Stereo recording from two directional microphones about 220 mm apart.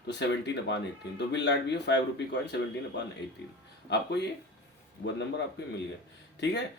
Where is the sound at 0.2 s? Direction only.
50° left (ahead or behind).